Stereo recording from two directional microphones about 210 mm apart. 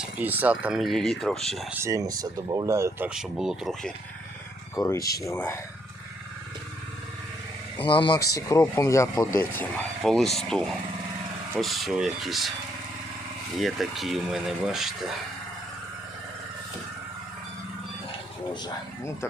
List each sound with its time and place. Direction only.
0.0 s speech: 10° right (ahead or behind)
1.7 s speech: 15° right (ahead or behind)
3.1 s speech: 5° right (ahead or behind)
4.7 s speech: 15° left (ahead or behind)
7.8 s speech: 25° left (ahead or behind)
9.6 s speech: centre (ahead or behind)
13.6 s speech: centre (ahead or behind)